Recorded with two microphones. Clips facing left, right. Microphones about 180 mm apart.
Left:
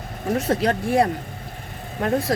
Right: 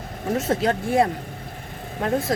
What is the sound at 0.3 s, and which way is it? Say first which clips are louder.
Speech: left 1 dB; 25° right (ahead or behind).